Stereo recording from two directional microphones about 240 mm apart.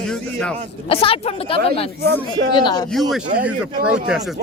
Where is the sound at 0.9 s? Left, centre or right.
Left.